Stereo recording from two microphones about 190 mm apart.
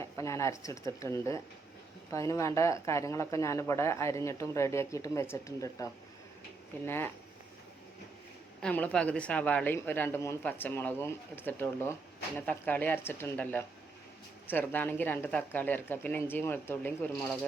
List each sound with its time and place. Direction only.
0.0 s a man's voice: 15° left (ahead or behind)
8.6 s a man's voice: 5° left (ahead or behind)